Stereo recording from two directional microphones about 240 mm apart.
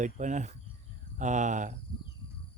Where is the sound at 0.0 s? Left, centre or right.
Right.